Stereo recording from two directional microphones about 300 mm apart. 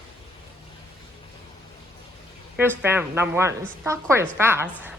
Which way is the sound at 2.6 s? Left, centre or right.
Centre.